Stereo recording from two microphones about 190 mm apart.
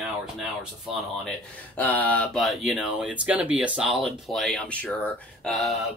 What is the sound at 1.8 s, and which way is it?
Speech, 10° left (ahead or behind).